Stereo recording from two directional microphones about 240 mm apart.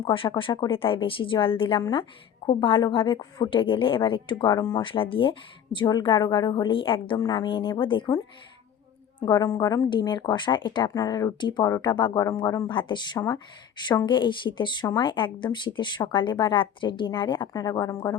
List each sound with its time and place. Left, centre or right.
0.0 s a woman's voice: left
9.2 s a woman's voice: centre